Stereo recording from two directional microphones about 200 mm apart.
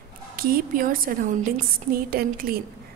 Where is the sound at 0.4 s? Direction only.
45° right (ahead or behind).